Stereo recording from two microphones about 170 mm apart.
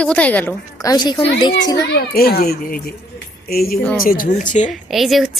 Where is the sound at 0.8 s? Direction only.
25° left (ahead or behind).